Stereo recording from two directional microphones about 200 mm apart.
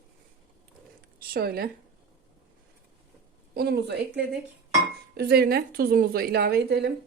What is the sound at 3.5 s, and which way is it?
A woman's voice, 55° right (ahead or behind).